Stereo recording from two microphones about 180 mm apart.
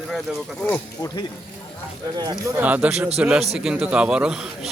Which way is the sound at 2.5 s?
10° right (ahead or behind).